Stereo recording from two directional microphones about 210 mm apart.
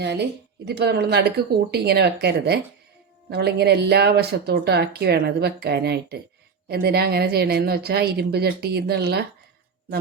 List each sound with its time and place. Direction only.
0.0 s speech: 55° right (ahead or behind)